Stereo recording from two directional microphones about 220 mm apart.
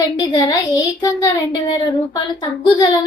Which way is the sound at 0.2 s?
15° left (ahead or behind).